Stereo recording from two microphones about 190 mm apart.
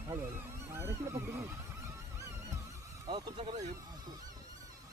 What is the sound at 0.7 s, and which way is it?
Speech, 15° right (ahead or behind).